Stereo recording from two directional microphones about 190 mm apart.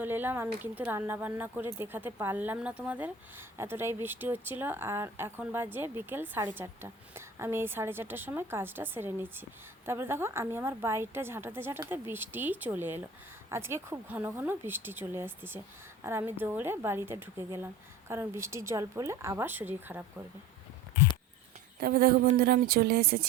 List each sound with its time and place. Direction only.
0.0 s speech: 10° right (ahead or behind)
21.8 s speech: 50° right (ahead or behind)